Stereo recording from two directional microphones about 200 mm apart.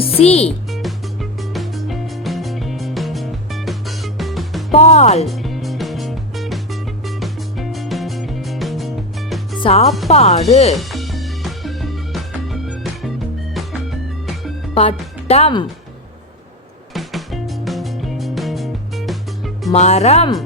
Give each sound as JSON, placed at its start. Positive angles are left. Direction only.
{"t": 0.0, "sound": "speech", "side_deg": 30}
{"t": 0.7, "sound": "music", "side_deg": 0}
{"t": 4.7, "sound": "speech", "side_deg": 35}
{"t": 5.2, "sound": "music", "side_deg": 0}
{"t": 9.6, "sound": "speech", "side_deg": 30}
{"t": 10.8, "sound": "music", "side_deg": 0}
{"t": 15.3, "sound": "speech", "side_deg": 30}
{"t": 16.9, "sound": "music", "side_deg": 0}
{"t": 19.7, "sound": "speech", "side_deg": 35}